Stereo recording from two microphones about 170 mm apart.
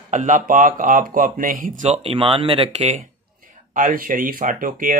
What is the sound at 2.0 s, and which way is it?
Speech, 35° right (ahead or behind).